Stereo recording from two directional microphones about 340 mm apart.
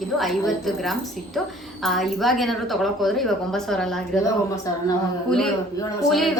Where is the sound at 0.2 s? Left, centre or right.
Centre.